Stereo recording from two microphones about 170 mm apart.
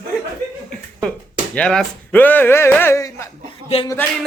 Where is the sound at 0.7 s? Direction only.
5° left (ahead or behind).